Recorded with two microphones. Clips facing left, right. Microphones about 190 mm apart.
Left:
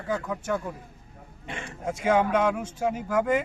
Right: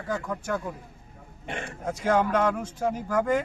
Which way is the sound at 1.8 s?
10° left (ahead or behind).